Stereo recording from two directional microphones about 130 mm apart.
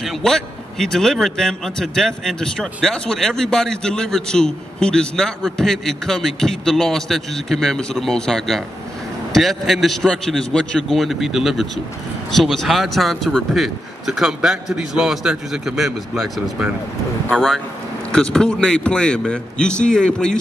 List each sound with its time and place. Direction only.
0.0 s a man's voice: 5° left (ahead or behind)